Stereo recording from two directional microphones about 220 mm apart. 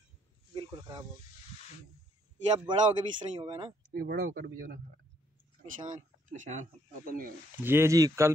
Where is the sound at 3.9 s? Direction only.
45° right (ahead or behind).